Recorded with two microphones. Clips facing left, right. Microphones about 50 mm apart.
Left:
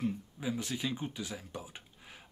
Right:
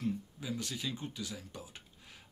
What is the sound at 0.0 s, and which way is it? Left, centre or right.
Speech, centre.